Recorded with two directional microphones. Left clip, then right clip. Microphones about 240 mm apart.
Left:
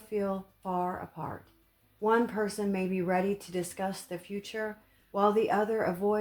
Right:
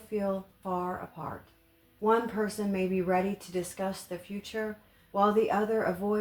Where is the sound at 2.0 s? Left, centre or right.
Left.